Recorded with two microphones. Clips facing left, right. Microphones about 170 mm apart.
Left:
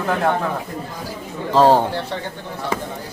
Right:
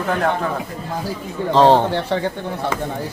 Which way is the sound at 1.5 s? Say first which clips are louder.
Right 1 dB; 5° left (ahead or behind).